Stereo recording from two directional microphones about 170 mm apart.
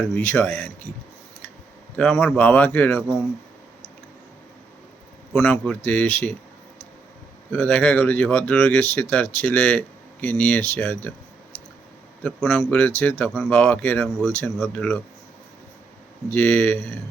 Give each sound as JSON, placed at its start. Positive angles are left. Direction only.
{"t": 0.0, "sound": "speech", "side_deg": 10}
{"t": 2.0, "sound": "speech", "side_deg": 10}
{"t": 5.3, "sound": "speech", "side_deg": 5}
{"t": 7.5, "sound": "speech", "side_deg": 10}
{"t": 12.2, "sound": "speech", "side_deg": 5}
{"t": 16.3, "sound": "speech", "side_deg": 10}